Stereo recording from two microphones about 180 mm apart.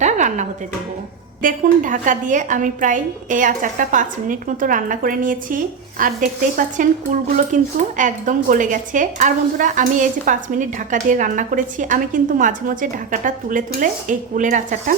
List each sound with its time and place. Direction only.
0.0 s music: 40° right (ahead or behind)
1.4 s speech: 50° right (ahead or behind)